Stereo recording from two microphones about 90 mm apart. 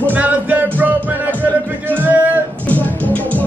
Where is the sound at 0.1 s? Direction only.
20° right (ahead or behind).